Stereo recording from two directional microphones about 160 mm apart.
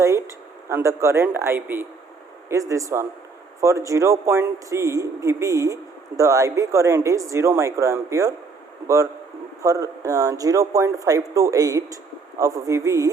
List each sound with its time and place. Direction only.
0.0 s a man's voice: 20° right (ahead or behind)
9.6 s a man's voice: 20° right (ahead or behind)